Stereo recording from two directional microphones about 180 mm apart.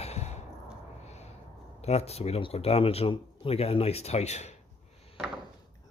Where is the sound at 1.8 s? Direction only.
35° left (ahead or behind).